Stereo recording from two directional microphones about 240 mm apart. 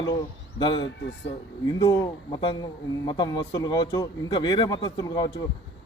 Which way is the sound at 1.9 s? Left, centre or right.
Centre.